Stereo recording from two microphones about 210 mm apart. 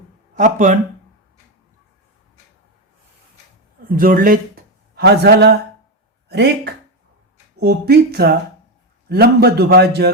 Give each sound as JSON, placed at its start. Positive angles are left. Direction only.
{"t": 0.3, "sound": "speech", "side_deg": -35}
{"t": 3.8, "sound": "speech", "side_deg": -40}
{"t": 6.2, "sound": "a sound", "side_deg": -55}
{"t": 7.6, "sound": "a man's voice", "side_deg": -50}